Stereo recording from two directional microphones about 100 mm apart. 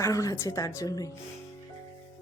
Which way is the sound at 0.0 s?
35° left (ahead or behind).